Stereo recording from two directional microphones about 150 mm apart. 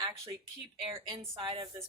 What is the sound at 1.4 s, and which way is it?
Speech, 30° right (ahead or behind).